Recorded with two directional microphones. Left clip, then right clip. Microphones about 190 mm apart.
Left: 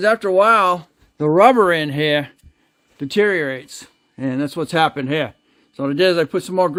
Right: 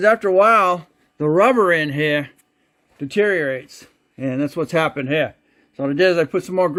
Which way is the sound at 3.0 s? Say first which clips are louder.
Left 1 dB; 25° left (ahead or behind).